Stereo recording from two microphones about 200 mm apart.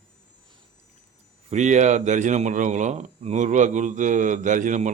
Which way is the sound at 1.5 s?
35° right (ahead or behind).